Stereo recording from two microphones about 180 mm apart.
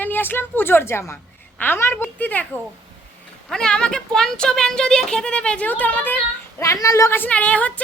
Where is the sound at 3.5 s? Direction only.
5° left (ahead or behind).